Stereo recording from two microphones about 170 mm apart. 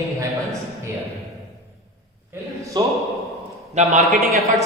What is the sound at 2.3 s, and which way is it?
Speech, 20° right (ahead or behind).